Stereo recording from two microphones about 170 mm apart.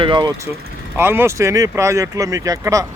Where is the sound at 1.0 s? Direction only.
15° right (ahead or behind).